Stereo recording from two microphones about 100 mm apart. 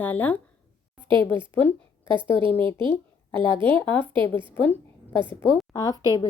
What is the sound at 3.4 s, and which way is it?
A woman's voice, 55° right (ahead or behind).